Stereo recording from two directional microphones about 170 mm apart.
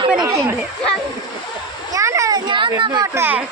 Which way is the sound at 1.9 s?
20° right (ahead or behind).